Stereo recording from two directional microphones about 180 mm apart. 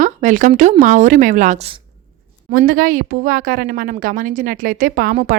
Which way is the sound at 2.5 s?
50° right (ahead or behind).